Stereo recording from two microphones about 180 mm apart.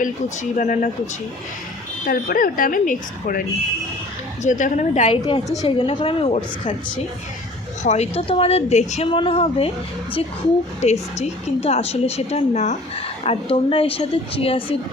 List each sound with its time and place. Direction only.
0.5 s speech: 45° left (ahead or behind)
2.0 s speech: 50° left (ahead or behind)
4.4 s speech: 45° left (ahead or behind)
5.2 s a woman's voice: 25° left (ahead or behind)
10.8 s a woman's voice: 40° left (ahead or behind)